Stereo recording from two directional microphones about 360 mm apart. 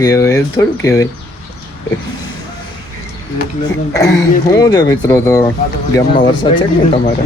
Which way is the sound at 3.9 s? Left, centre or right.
Centre.